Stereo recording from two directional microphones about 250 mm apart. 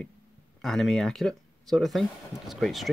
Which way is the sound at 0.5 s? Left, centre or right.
Centre.